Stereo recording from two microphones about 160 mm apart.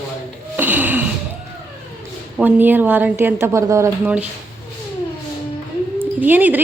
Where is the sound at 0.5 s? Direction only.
10° right (ahead or behind).